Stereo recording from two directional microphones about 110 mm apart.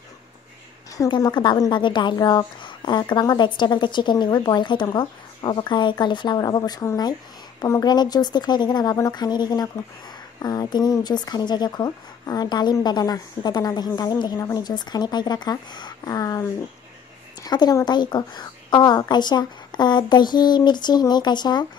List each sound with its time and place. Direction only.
0.9 s a woman's voice: 35° left (ahead or behind)